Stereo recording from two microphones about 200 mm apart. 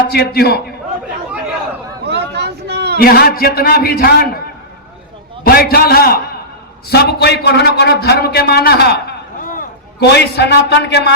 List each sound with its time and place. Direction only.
0.1 s a man's voice: 50° left (ahead or behind)
2.0 s a sound: 55° right (ahead or behind)
3.0 s a man's voice: 50° left (ahead or behind)
5.4 s a man's voice: 50° left (ahead or behind)